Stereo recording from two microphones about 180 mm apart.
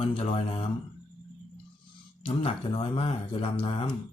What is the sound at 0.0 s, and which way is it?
Speech, 35° left (ahead or behind).